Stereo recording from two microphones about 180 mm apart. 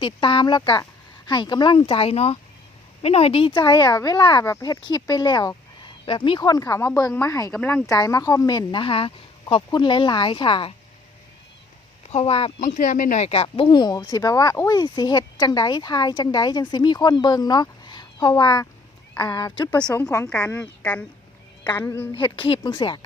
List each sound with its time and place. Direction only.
0.0 s speech: 25° left (ahead or behind)
7.5 s speech: 5° left (ahead or behind)
7.9 s speech: 20° left (ahead or behind)
12.1 s speech: 30° left (ahead or behind)
12.6 s speech: 45° left (ahead or behind); by 20.2 s 15° left (ahead or behind)
20.2 s speech: 5° left (ahead or behind)
22.1 s speech: 30° left (ahead or behind)